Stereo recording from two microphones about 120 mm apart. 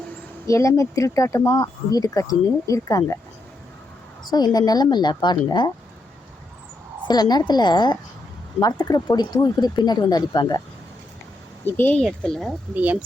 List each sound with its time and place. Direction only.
0.4 s speech: 25° left (ahead or behind)
4.3 s speech: 35° left (ahead or behind)
7.1 s speech: 35° left (ahead or behind)
11.6 s speech: 15° left (ahead or behind)
12.0 s speech: 5° left (ahead or behind)
12.7 s speech: 15° right (ahead or behind)